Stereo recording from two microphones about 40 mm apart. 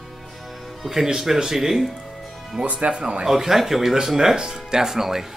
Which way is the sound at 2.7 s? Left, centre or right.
Right.